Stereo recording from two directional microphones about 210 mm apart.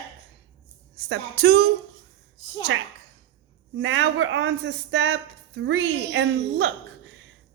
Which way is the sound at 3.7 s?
65° right (ahead or behind).